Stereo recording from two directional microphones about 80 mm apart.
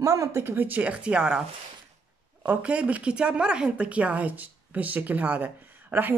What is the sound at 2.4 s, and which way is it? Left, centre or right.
Speech, centre.